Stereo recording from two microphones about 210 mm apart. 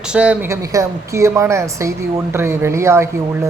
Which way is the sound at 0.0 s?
5° right (ahead or behind).